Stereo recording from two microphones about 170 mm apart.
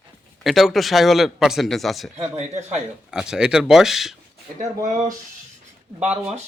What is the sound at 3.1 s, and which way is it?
Speech, 5° right (ahead or behind).